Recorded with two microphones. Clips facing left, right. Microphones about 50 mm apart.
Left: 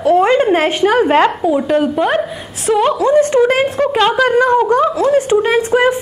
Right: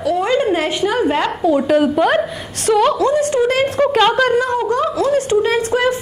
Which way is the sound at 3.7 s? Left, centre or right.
Centre.